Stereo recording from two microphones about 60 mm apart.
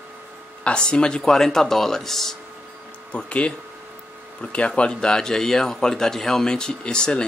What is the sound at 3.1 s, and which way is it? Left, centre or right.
A man's voice, centre.